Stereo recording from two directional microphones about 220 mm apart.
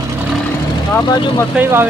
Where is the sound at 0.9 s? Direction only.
15° left (ahead or behind).